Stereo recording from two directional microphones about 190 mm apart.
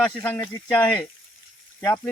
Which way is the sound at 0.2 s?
15° left (ahead or behind).